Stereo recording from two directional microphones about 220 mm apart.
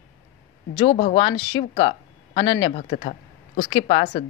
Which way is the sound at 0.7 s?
30° left (ahead or behind).